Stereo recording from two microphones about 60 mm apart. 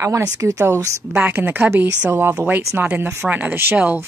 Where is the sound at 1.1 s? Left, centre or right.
Right.